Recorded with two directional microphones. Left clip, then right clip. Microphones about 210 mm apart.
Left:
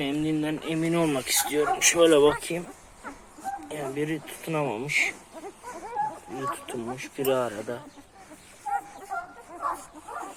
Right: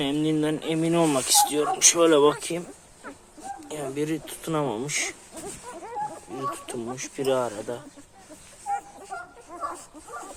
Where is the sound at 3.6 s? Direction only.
Centre (ahead or behind).